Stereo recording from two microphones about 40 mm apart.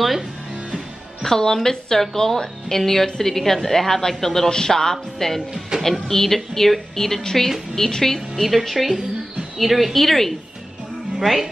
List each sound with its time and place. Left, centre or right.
1.2 s speech: centre
5.7 s speech: centre
6.0 s speech: centre
8.5 s a woman's voice: centre
11.1 s speech: centre